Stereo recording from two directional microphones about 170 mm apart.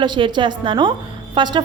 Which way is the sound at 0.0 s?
25° right (ahead or behind).